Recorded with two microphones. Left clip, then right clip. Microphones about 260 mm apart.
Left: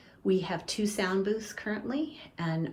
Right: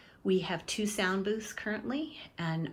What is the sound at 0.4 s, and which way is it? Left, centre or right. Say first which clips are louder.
Speech: left 2 dB; right.